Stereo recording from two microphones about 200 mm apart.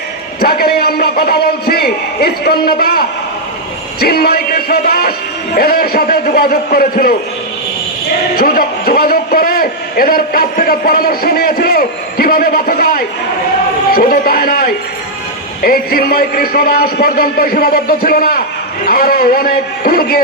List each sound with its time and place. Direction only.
0.3 s a man's voice: 50° left (ahead or behind)
8.4 s a man's voice: 50° left (ahead or behind)